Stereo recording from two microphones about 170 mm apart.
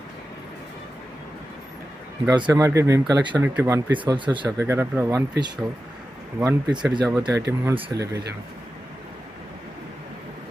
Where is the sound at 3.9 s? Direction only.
30° right (ahead or behind).